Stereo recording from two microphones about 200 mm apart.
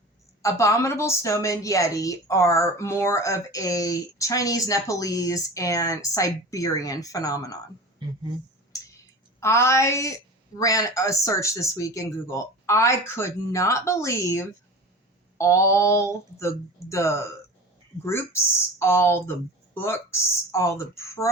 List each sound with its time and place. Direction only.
0.4 s a woman's voice: 15° left (ahead or behind)
8.7 s a sound: 15° left (ahead or behind)
9.4 s a woman's voice: 15° left (ahead or behind)